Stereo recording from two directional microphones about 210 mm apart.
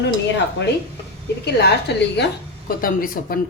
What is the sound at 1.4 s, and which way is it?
Speech, 50° left (ahead or behind).